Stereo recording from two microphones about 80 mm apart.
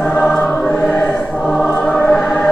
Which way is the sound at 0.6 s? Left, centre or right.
Centre.